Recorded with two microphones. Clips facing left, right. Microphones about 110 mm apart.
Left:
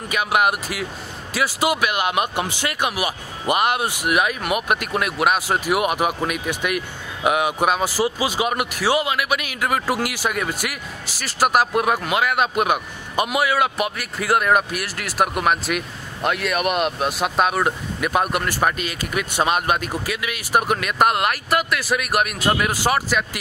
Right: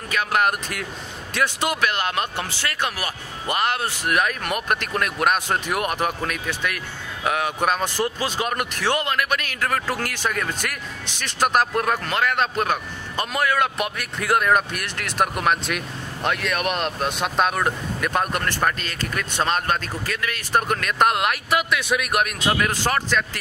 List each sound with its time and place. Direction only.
0.1 s speech: 10° left (ahead or behind)